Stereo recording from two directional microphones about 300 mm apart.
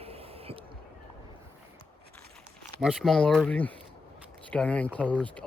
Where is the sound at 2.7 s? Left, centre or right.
Centre.